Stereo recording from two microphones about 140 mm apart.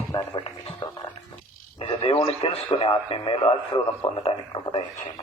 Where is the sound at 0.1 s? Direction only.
30° left (ahead or behind).